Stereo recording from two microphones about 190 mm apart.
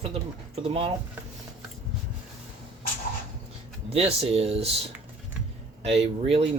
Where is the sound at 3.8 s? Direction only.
35° right (ahead or behind).